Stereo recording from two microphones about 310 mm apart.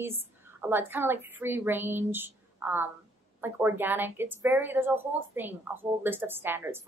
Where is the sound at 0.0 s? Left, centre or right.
Centre.